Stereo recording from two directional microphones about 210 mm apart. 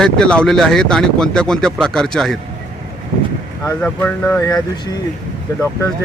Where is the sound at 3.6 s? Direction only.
5° left (ahead or behind).